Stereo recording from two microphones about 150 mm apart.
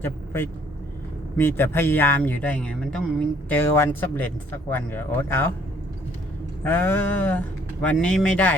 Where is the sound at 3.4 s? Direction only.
15° left (ahead or behind).